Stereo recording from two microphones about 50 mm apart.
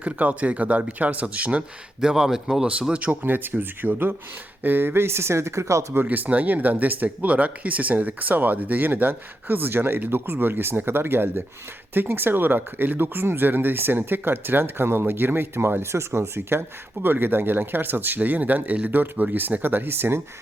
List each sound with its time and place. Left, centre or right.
0.0 s speech: right
2.0 s speech: centre
2.9 s speech: right
3.2 s speech: right
6.1 s speech: right